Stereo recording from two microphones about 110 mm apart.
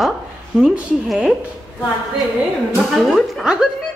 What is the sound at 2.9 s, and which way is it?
Speech, centre (ahead or behind).